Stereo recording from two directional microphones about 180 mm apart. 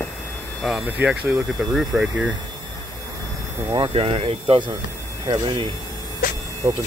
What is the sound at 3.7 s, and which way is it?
Speech, 30° right (ahead or behind).